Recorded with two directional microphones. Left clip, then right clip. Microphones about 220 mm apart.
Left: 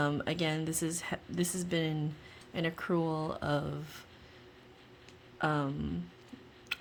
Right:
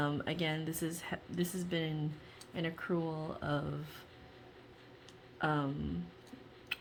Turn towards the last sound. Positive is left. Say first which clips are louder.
# left 2 dB
turn(degrees=20)  # may be behind; listen again after turning